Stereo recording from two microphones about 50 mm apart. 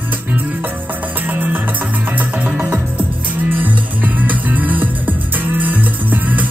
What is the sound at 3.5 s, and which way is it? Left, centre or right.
Music, right.